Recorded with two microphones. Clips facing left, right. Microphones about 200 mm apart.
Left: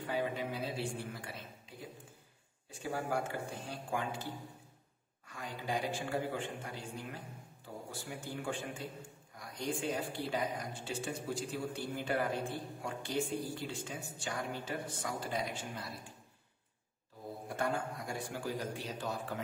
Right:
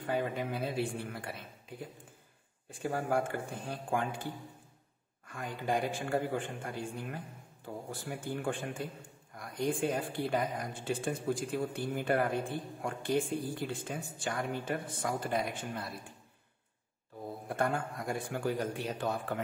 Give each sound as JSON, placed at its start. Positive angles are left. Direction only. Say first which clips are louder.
{"t": 0.0, "sound": "a man's voice", "louder": "right 3 dB", "side_deg": -50}
{"t": 17.5, "sound": "a man's voice", "louder": "right 3 dB", "side_deg": -55}